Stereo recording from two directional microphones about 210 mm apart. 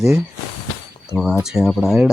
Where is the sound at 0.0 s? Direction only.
5° right (ahead or behind).